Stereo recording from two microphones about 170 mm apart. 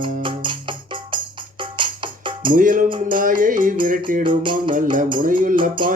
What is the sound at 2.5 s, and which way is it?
Music, 55° right (ahead or behind).